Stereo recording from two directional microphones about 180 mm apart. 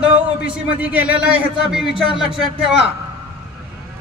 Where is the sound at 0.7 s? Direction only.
10° right (ahead or behind).